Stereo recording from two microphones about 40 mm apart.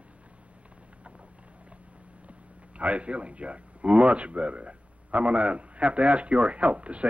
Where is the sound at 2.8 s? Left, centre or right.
Right.